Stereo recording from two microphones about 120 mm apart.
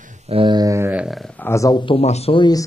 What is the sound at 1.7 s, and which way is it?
Speech, 45° left (ahead or behind).